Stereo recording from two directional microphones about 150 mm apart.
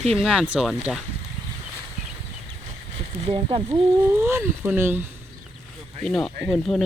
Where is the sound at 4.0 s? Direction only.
15° right (ahead or behind).